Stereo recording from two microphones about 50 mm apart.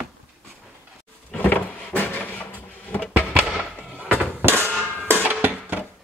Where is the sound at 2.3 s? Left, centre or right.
Left.